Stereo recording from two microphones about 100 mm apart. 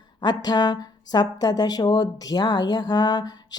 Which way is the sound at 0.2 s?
45° left (ahead or behind).